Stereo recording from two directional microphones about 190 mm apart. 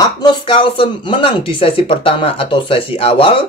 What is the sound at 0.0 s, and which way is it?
Speech, 25° left (ahead or behind).